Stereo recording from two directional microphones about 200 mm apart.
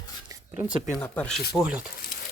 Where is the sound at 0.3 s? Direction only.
10° right (ahead or behind).